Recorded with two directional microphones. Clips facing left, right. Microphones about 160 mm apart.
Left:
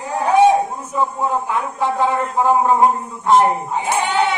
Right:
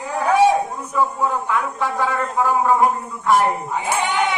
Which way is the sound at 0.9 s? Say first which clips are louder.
Even; 25° left (ahead or behind).